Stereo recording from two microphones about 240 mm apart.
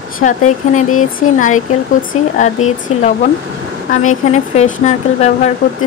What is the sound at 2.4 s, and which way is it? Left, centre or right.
Speech, left.